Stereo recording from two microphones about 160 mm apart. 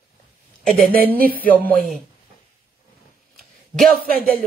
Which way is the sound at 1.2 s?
65° right (ahead or behind).